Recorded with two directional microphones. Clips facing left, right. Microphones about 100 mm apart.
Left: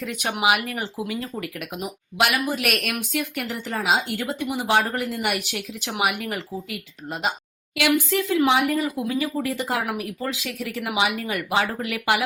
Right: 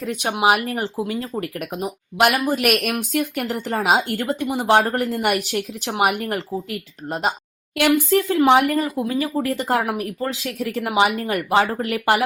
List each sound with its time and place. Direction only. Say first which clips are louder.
0.0 s speech: right 4 dB; 35° right (ahead or behind); by 8.9 s 50° right (ahead or behind)
9.0 s speech: right 3 dB; 40° right (ahead or behind)
9.8 s speech: right 3 dB; 35° right (ahead or behind)